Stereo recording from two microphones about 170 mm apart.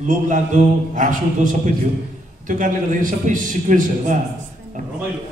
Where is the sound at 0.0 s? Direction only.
50° right (ahead or behind).